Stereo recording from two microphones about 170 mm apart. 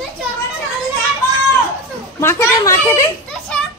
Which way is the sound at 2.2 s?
15° left (ahead or behind).